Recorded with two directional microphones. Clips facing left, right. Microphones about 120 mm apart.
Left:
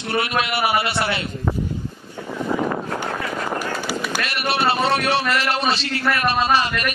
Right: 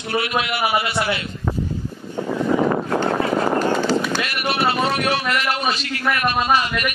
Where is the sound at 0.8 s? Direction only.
25° left (ahead or behind).